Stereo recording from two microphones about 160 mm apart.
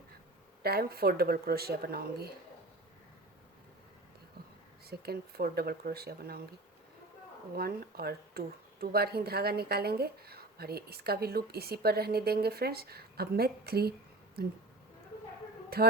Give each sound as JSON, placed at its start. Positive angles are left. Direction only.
{"t": 0.6, "sound": "speech", "side_deg": -75}
{"t": 4.9, "sound": "speech", "side_deg": -75}
{"t": 7.5, "sound": "speech", "side_deg": -70}
{"t": 15.7, "sound": "speech", "side_deg": -70}